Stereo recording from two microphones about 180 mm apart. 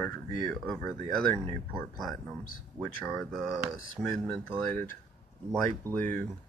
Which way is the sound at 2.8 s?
Centre (ahead or behind).